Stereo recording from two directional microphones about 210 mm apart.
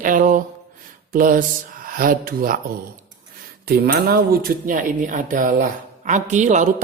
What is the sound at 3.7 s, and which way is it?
Speech, 45° right (ahead or behind).